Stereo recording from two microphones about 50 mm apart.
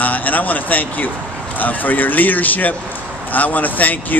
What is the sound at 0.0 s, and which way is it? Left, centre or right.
Speech, left.